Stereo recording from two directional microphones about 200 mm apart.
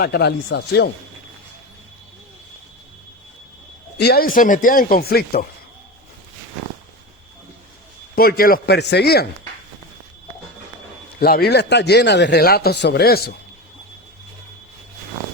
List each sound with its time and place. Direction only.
0.0 s speech: 55° left (ahead or behind)
3.9 s speech: 50° left (ahead or behind)
8.1 s speech: 50° left (ahead or behind)
11.2 s speech: 50° left (ahead or behind)